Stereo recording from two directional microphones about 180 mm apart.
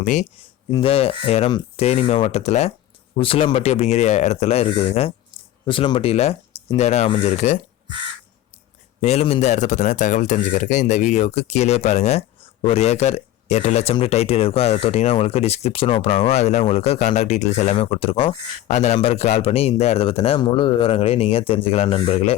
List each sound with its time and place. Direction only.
0.0 s speech: 40° left (ahead or behind)
0.7 s speech: 30° left (ahead or behind)
9.0 s speech: 35° left (ahead or behind)